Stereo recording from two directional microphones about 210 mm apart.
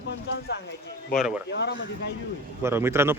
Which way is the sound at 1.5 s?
55° left (ahead or behind).